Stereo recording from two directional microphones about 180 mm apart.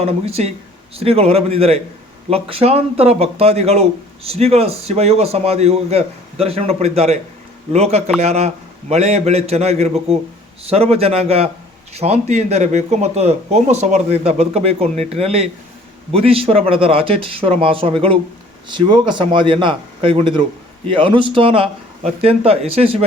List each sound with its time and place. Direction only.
0.0 s a man's voice: 35° right (ahead or behind)